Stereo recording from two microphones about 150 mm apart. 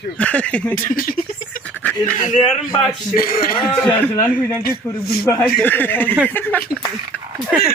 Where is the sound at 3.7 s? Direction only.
10° left (ahead or behind).